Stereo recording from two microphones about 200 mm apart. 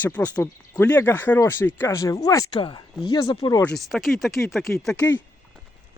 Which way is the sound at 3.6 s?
Centre (ahead or behind).